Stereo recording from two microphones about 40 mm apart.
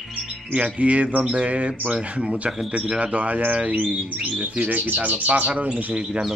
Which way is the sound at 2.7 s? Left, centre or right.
Right.